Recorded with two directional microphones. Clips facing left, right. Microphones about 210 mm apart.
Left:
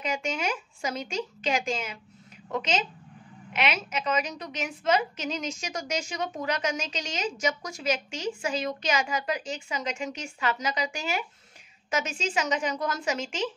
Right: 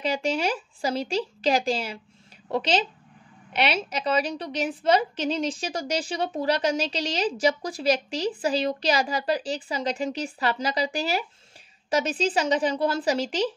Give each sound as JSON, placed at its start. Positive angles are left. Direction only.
{"t": 0.0, "sound": "a woman's voice", "side_deg": -35}